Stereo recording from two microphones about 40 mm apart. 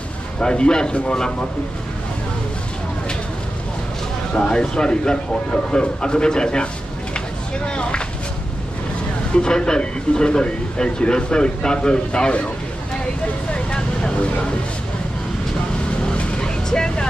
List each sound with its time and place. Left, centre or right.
0.4 s speech: left
4.4 s speech: left
7.2 s a sound: left
9.3 s speech: left
13.5 s vehicle: left
16.1 s vehicle: left